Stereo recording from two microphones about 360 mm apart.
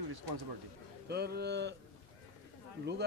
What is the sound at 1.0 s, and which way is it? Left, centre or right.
Speech, right.